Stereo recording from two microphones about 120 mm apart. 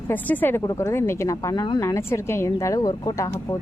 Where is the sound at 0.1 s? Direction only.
15° left (ahead or behind).